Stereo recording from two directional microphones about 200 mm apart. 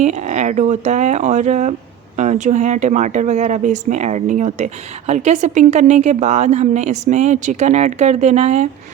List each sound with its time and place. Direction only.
0.0 s speech: 35° right (ahead or behind)